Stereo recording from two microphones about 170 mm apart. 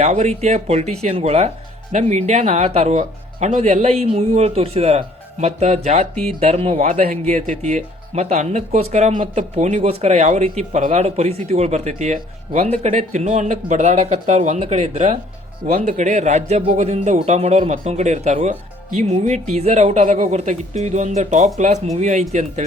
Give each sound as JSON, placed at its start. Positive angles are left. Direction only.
{"t": 0.0, "sound": "speech", "side_deg": -40}